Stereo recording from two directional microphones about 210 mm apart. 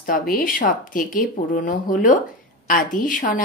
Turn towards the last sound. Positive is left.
turn(degrees=40)  # may be behind; listen again after turning